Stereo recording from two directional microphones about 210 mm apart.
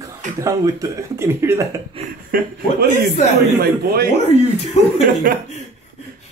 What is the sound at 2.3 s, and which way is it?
Speech, 45° right (ahead or behind).